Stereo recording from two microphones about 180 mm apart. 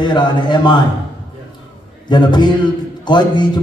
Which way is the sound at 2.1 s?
25° left (ahead or behind).